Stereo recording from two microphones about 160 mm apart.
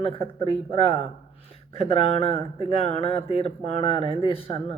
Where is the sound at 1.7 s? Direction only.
40° left (ahead or behind).